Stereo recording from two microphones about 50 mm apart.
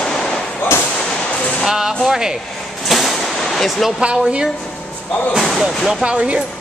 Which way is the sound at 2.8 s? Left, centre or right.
Centre.